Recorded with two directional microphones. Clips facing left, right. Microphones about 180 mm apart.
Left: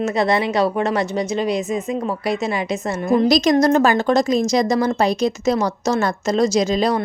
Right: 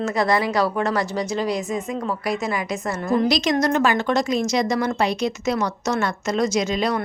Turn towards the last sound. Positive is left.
turn(degrees=35)  # may be behind; listen again after turning